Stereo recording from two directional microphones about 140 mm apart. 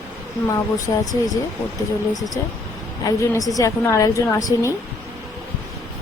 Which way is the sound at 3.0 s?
25° left (ahead or behind).